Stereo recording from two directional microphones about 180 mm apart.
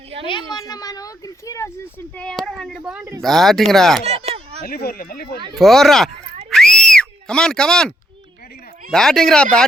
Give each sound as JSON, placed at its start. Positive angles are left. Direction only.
{"t": 0.3, "sound": "speech", "side_deg": 25}
{"t": 2.1, "sound": "speech", "side_deg": 5}
{"t": 4.0, "sound": "a sound", "side_deg": -35}
{"t": 4.6, "sound": "speech", "side_deg": 55}
{"t": 5.5, "sound": "speech", "side_deg": 0}
{"t": 6.5, "sound": "a sound", "side_deg": 5}
{"t": 8.9, "sound": "speech", "side_deg": 5}